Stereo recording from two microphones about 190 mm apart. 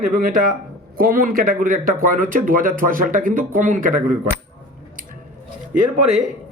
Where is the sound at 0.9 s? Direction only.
50° right (ahead or behind).